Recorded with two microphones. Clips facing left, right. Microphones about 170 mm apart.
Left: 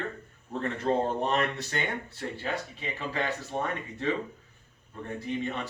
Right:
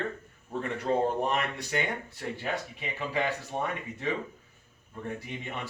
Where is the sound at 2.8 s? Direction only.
15° right (ahead or behind).